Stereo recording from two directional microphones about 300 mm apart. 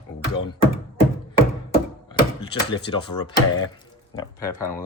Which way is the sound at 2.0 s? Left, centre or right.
Centre.